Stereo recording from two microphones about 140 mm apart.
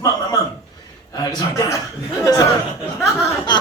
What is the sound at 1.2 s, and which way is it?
Speech, 25° left (ahead or behind).